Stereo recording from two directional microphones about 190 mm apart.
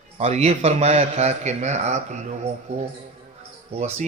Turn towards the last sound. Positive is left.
turn(degrees=-35)  # may be behind; listen again after turning